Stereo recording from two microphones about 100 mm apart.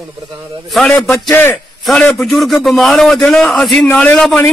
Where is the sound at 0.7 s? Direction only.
5° left (ahead or behind).